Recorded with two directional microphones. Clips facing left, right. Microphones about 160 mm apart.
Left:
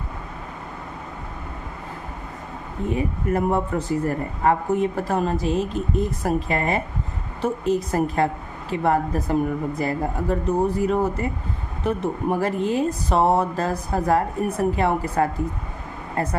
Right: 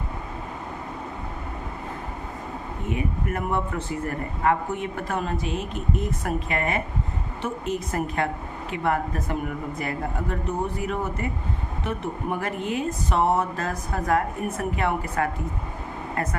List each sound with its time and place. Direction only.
2.9 s speech: 35° left (ahead or behind)